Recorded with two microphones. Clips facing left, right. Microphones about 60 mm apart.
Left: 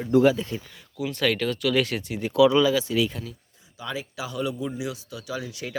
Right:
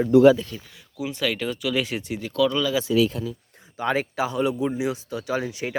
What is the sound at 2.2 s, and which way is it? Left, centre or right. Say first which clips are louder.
Speech: left 5 dB; centre.